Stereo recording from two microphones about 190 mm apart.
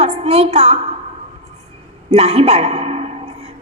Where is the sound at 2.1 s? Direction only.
35° right (ahead or behind).